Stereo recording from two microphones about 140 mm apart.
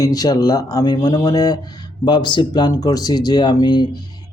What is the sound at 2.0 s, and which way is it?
Speech, 30° left (ahead or behind).